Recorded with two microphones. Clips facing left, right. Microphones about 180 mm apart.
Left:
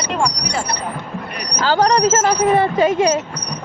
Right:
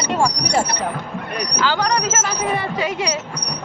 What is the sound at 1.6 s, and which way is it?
Speech, 40° left (ahead or behind).